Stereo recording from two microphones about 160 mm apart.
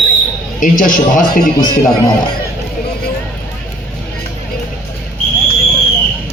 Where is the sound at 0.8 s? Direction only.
55° left (ahead or behind).